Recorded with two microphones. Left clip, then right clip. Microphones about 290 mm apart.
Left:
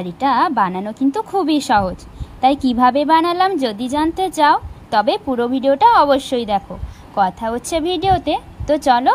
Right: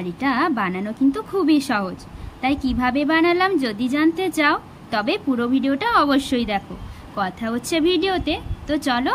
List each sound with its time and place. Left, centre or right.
0.0 s a woman's voice: centre